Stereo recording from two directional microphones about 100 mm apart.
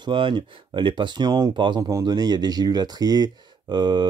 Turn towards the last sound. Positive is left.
turn(degrees=-50)  # may be behind; listen again after turning